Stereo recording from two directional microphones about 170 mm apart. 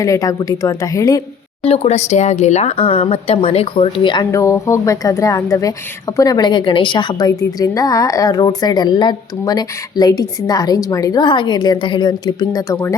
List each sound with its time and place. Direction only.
0.0 s speech: 20° left (ahead or behind)
1.6 s speech: 35° left (ahead or behind)